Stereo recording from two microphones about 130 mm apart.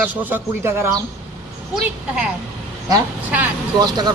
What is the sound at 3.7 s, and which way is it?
Speech, 30° right (ahead or behind).